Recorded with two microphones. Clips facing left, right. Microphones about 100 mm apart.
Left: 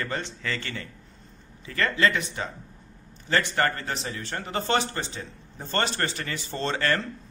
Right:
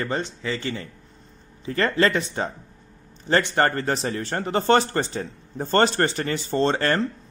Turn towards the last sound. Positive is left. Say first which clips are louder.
# right 5 dB
turn(degrees=-35)  # may be behind; listen again after turning